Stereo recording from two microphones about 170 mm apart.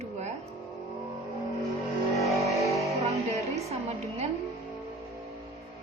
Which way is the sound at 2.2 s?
Centre (ahead or behind).